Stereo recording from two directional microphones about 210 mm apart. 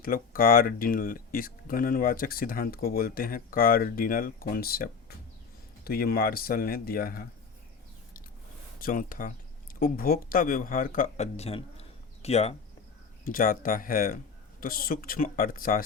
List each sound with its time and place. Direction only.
0.0 s speech: 45° left (ahead or behind)
8.8 s speech: 40° left (ahead or behind)
13.2 s speech: 40° left (ahead or behind)